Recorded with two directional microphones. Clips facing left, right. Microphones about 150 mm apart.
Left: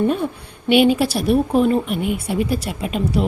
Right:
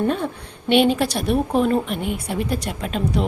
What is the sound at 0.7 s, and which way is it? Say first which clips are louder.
A woman's voice: left 2 dB; 5° left (ahead or behind).